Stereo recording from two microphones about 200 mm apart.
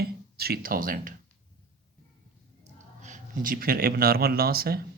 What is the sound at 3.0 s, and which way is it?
Speech, 40° right (ahead or behind).